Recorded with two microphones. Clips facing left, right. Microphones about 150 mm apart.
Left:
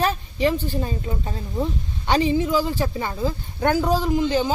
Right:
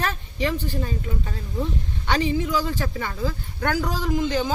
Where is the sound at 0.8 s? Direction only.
30° left (ahead or behind).